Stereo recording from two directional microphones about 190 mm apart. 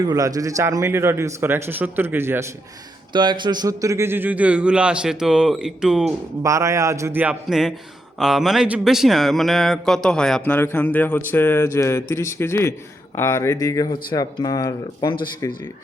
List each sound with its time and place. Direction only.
0.0 s a man's voice: 20° right (ahead or behind)
3.1 s a man's voice: 25° right (ahead or behind); by 6.1 s 5° right (ahead or behind)
6.4 s a man's voice: 15° right (ahead or behind); by 15.6 s 20° left (ahead or behind)